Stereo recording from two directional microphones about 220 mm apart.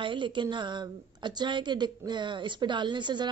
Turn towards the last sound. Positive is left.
turn(degrees=-20)  # may be behind; listen again after turning